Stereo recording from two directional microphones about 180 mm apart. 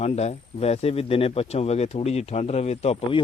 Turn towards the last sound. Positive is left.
turn(degrees=35)  # may be behind; listen again after turning